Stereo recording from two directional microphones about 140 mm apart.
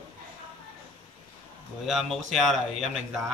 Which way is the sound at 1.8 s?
Centre (ahead or behind).